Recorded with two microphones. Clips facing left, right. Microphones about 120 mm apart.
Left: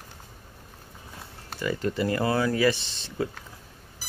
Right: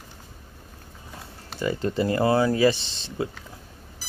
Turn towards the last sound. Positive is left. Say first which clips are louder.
# right 1 dB
turn(degrees=-25)  # may be behind; listen again after turning